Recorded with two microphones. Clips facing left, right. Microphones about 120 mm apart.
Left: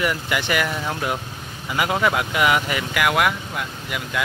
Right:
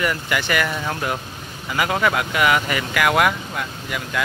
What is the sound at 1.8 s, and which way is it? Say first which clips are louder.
Speech: even; 15° left (ahead or behind).